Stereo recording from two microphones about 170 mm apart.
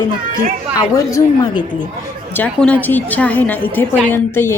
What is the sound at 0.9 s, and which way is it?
A woman's voice, 20° left (ahead or behind).